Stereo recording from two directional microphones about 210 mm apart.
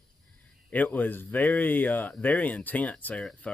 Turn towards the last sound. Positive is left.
turn(degrees=5)  # may be behind; listen again after turning